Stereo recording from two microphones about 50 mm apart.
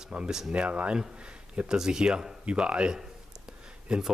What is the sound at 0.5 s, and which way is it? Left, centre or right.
Speech, right.